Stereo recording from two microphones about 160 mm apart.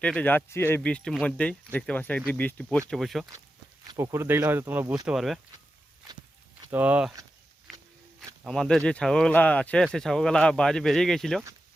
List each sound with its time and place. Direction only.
0.0 s speech: 10° left (ahead or behind)
3.8 s speech: 20° right (ahead or behind)
5.0 s speech: centre (ahead or behind)
6.7 s speech: 10° right (ahead or behind)
8.4 s speech: 5° left (ahead or behind)